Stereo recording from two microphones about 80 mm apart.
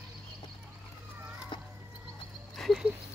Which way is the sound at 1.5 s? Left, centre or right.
Left.